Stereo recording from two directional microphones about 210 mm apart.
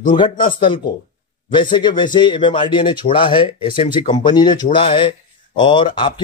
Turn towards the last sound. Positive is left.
turn(degrees=20)  # may be behind; listen again after turning